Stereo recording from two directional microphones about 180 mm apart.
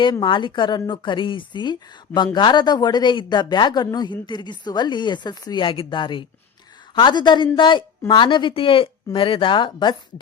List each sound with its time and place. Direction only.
0.0 s a woman's voice: 25° left (ahead or behind)